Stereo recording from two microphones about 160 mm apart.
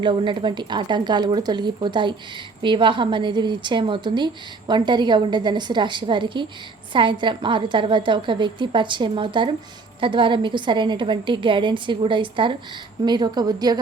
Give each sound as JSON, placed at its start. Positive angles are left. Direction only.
{"t": 0.0, "sound": "a woman's voice", "side_deg": -30}